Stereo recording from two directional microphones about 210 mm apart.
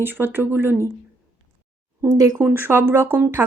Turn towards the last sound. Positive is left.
turn(degrees=-10)  # may be behind; listen again after turning